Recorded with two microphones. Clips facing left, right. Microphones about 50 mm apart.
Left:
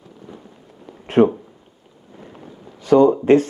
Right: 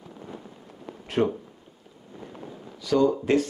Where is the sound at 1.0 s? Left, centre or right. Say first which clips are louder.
Left 10 dB; left.